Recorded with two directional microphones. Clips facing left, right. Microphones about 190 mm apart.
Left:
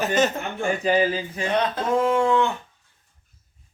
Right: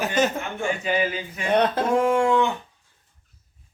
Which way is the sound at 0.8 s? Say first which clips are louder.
Left 4 dB; 35° left (ahead or behind).